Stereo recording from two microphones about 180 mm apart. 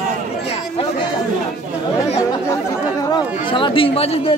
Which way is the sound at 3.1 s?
25° left (ahead or behind).